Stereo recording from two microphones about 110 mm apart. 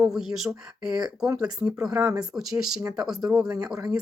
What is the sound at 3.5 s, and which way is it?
Speech, 30° right (ahead or behind).